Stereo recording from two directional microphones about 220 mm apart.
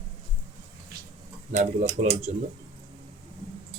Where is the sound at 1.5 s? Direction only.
30° right (ahead or behind).